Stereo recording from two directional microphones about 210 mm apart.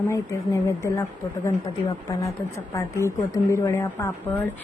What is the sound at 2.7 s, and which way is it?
A woman's voice, 15° left (ahead or behind).